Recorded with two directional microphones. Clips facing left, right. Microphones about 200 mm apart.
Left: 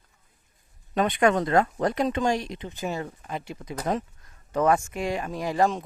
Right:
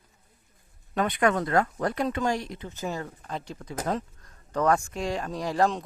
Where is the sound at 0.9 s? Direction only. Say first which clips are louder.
Left 3 dB; 20° left (ahead or behind).